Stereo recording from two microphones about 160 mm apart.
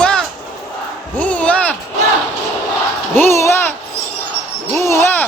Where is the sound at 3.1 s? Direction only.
15° left (ahead or behind).